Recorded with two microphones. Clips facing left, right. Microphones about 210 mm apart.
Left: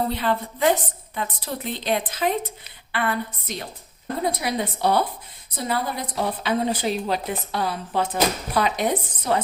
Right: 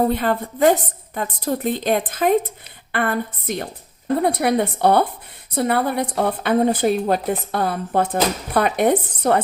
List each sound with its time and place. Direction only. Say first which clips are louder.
0.1 s a woman's voice: right 4 dB; 50° right (ahead or behind)